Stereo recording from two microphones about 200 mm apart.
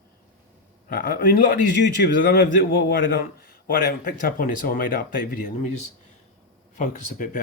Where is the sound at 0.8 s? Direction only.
50° left (ahead or behind).